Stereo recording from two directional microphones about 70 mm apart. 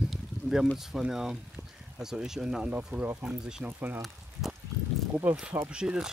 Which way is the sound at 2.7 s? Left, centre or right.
Right.